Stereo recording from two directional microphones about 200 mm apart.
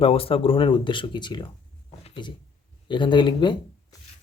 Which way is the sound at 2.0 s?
25° left (ahead or behind).